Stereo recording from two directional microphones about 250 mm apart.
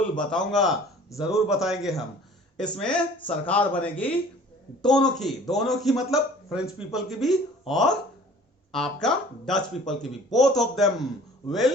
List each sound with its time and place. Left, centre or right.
0.2 s a man's voice: centre